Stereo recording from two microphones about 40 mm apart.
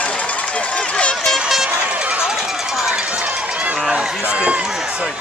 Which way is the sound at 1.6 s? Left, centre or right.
Right.